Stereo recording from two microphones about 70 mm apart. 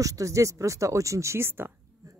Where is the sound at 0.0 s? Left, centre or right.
Right.